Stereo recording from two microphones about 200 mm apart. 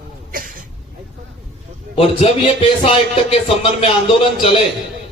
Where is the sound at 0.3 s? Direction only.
45° right (ahead or behind).